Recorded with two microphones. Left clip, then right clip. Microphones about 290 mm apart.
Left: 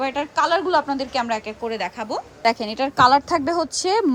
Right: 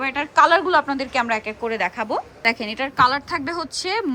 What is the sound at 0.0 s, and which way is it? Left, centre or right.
A woman's voice, centre.